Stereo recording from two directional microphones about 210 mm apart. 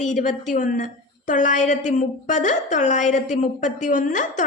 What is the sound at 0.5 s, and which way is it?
A woman's voice, 40° left (ahead or behind).